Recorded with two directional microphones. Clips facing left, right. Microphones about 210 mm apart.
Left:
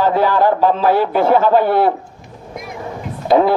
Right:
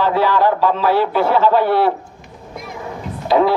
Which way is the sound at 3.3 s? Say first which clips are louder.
Left 2 dB; 50° left (ahead or behind).